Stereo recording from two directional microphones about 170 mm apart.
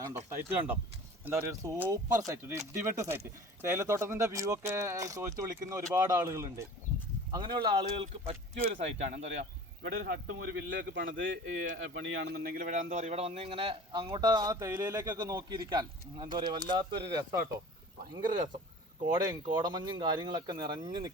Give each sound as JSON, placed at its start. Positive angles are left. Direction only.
{"t": 0.0, "sound": "a man's voice", "side_deg": -15}
{"t": 9.8, "sound": "a man's voice", "side_deg": -60}
{"t": 19.3, "sound": "speech", "side_deg": -25}